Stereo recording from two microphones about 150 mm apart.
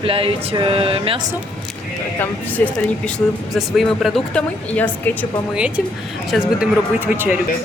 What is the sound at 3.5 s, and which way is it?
Speech, centre (ahead or behind).